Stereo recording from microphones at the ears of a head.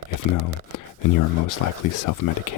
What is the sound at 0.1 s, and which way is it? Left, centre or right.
Speech, left.